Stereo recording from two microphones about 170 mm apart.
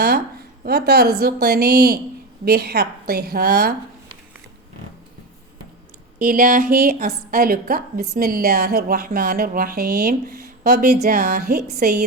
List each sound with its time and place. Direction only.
0.6 s a woman's voice: 70° right (ahead or behind)
6.1 s a woman's voice: 60° right (ahead or behind)